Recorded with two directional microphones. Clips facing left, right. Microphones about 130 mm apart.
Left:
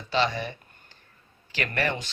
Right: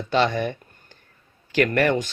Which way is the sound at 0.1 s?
50° right (ahead or behind).